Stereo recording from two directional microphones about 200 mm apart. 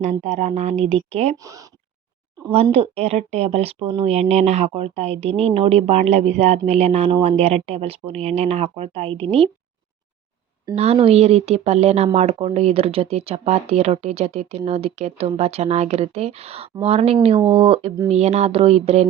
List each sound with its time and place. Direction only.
0.0 s speech: 35° right (ahead or behind)
2.6 s speech: 30° right (ahead or behind)
10.9 s speech: 30° right (ahead or behind)